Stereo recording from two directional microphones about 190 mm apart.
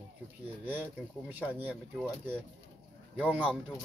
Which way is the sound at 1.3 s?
10° right (ahead or behind).